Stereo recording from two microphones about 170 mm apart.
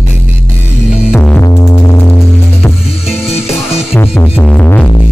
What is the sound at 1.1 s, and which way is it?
Music, 10° left (ahead or behind).